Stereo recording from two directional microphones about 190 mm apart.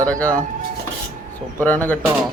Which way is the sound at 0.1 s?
5° left (ahead or behind).